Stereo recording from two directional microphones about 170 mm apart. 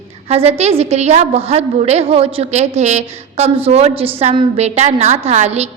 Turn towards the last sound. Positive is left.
turn(degrees=-40)  # may be behind; listen again after turning